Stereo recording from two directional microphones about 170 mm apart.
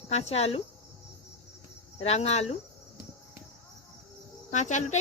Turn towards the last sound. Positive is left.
turn(degrees=45)  # may be behind; listen again after turning